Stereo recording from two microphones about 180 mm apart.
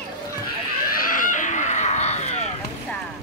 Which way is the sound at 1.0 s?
50° left (ahead or behind).